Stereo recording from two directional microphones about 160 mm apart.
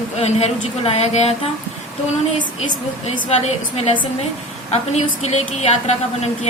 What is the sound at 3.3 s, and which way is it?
Speech, 40° left (ahead or behind).